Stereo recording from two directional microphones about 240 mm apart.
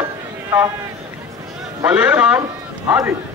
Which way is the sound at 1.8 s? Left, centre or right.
Centre.